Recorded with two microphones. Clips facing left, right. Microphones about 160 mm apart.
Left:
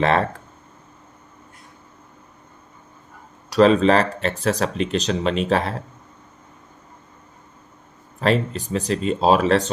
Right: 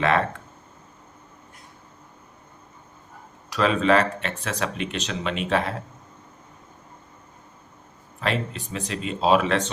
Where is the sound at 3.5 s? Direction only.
35° left (ahead or behind).